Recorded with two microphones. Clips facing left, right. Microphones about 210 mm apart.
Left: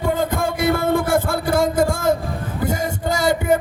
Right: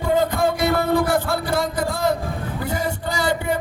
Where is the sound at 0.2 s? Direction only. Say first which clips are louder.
Right 1 dB; 50° left (ahead or behind).